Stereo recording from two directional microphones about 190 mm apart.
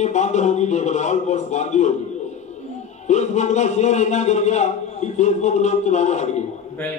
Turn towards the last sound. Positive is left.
turn(degrees=40)  # may be behind; listen again after turning